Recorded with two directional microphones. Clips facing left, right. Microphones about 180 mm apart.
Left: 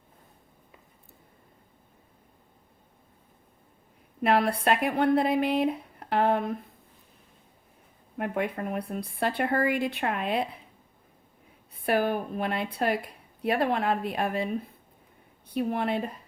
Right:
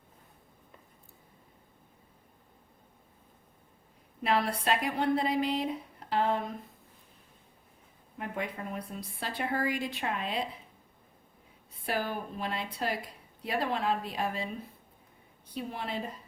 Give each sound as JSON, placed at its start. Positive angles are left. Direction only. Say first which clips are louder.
{"t": 4.2, "sound": "speech", "louder": "left 5 dB", "side_deg": 55}
{"t": 8.2, "sound": "speech", "louder": "left 7 dB", "side_deg": 60}
{"t": 11.9, "sound": "speech", "louder": "left 8 dB", "side_deg": 60}
{"t": 15.5, "sound": "speech", "louder": "left 9 dB", "side_deg": 60}